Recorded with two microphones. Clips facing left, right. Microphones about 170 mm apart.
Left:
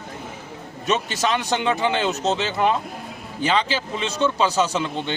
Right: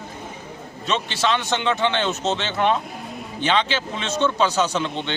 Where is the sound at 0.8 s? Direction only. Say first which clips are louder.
Left 2 dB; 45° left (ahead or behind).